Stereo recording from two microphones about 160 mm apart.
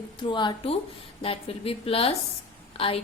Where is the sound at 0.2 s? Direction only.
30° left (ahead or behind).